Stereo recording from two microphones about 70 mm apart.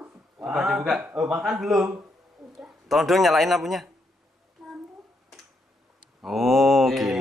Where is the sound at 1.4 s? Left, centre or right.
Centre.